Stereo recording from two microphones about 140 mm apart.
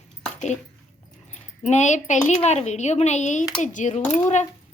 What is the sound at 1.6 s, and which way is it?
Speech, 55° left (ahead or behind).